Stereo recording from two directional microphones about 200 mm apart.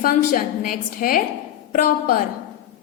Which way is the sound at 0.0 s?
45° left (ahead or behind).